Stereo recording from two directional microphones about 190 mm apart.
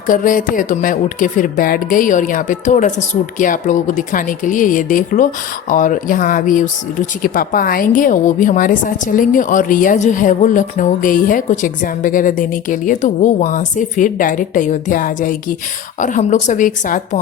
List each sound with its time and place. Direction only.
0.1 s a woman's voice: 45° left (ahead or behind)